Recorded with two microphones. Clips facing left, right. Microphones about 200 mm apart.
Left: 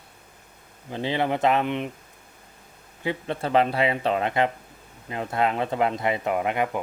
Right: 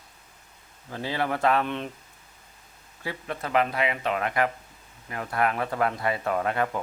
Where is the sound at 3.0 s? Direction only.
25° left (ahead or behind).